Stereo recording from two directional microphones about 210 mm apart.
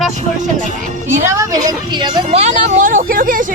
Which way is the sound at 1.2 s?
15° right (ahead or behind).